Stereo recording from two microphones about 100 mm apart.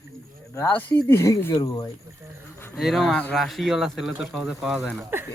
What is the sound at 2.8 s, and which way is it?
Speech, centre (ahead or behind).